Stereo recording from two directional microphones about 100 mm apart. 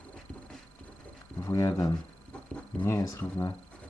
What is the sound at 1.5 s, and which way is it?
Speech, 35° left (ahead or behind).